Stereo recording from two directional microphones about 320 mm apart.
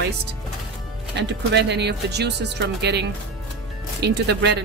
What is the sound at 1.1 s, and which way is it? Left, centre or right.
Speech, right.